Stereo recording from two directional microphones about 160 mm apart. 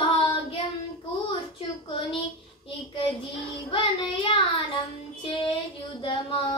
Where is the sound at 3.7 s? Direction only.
30° left (ahead or behind).